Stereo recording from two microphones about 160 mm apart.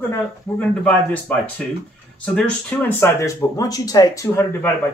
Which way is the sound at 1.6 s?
5° left (ahead or behind).